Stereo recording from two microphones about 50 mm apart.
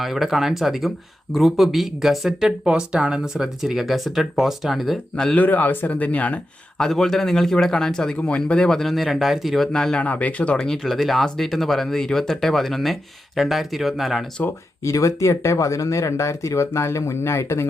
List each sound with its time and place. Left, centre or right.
0.0 s speech: centre
2.6 s speech: centre
5.1 s a man's voice: centre
5.4 s a man's voice: left
5.9 s speech: left
6.7 s a man's voice: centre
9.7 s a man's voice: centre
10.0 s speech: left
10.6 s speech: centre
14.8 s speech: left